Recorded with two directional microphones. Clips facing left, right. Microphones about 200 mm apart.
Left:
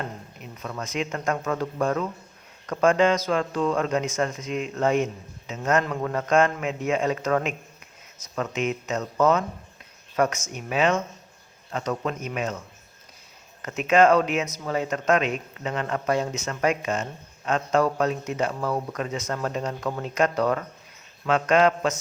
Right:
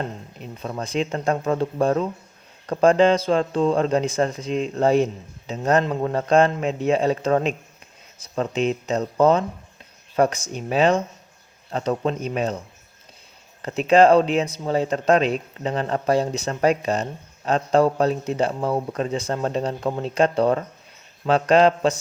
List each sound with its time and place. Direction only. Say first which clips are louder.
0.0 s speech: right 4 dB; 30° right (ahead or behind)